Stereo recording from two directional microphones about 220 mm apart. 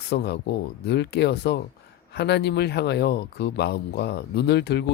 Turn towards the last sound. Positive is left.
turn(degrees=50)  # may be behind; listen again after turning